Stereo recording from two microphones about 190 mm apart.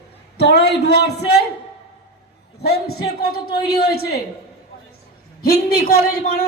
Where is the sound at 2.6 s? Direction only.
55° left (ahead or behind).